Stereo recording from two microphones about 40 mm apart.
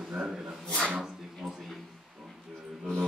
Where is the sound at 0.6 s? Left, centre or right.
Left.